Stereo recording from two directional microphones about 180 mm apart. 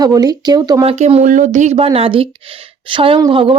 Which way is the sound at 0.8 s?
35° right (ahead or behind).